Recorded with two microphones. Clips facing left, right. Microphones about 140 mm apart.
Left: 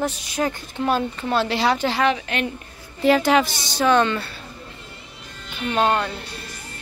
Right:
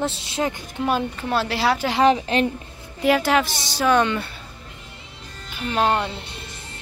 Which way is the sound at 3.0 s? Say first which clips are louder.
Left 2 dB; 5° right (ahead or behind).